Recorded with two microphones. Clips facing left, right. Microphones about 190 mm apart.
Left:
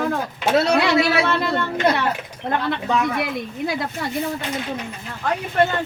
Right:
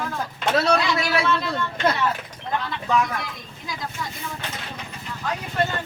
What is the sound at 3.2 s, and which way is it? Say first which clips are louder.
Speech: left 12 dB; 65° left (ahead or behind).